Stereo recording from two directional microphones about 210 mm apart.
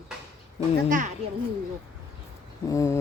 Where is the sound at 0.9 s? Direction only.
40° right (ahead or behind).